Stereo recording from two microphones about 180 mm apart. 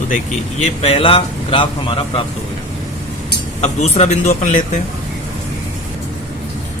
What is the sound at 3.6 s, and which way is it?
Speech, 40° left (ahead or behind).